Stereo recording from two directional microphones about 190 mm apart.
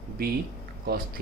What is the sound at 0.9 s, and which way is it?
Speech, 55° right (ahead or behind).